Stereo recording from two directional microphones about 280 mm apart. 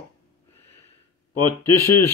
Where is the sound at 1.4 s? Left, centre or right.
Left.